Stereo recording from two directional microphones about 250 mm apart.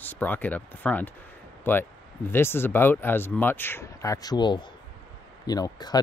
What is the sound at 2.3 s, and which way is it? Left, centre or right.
Speech, centre.